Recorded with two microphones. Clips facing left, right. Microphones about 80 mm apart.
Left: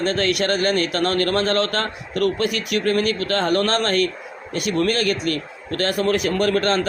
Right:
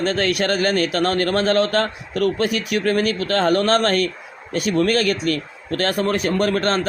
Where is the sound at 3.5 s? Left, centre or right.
Right.